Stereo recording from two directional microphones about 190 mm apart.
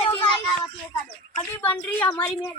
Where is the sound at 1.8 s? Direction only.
10° left (ahead or behind).